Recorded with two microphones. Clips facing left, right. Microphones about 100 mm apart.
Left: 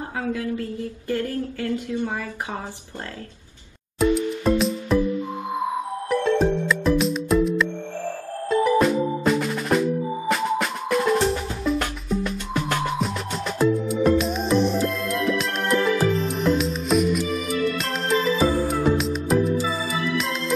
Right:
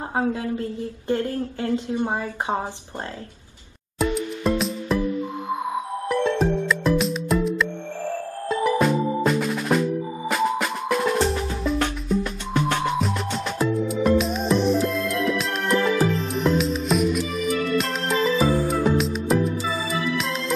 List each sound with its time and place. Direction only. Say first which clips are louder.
0.1 s speech: right 3 dB; 30° right (ahead or behind)
4.0 s music: left 3 dB; centre (ahead or behind)
6.0 s music: left 2 dB; centre (ahead or behind)
8.7 s music: left 1 dB; centre (ahead or behind)